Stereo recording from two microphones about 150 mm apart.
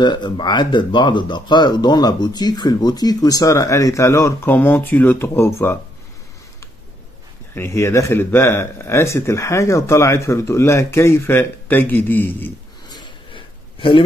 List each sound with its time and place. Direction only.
0.0 s speech: 30° left (ahead or behind)
7.5 s speech: 15° left (ahead or behind)
12.9 s a sound: 35° left (ahead or behind)